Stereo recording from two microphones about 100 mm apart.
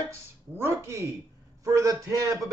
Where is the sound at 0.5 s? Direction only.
25° right (ahead or behind).